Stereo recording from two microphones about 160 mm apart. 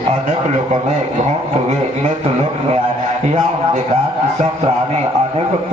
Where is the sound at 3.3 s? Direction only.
40° right (ahead or behind).